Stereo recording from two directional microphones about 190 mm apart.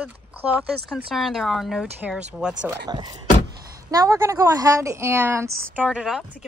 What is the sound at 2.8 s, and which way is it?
A woman's voice, 20° right (ahead or behind).